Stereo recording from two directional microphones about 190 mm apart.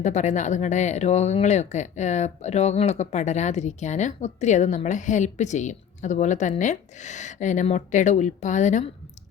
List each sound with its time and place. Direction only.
0.0 s speech: 40° left (ahead or behind)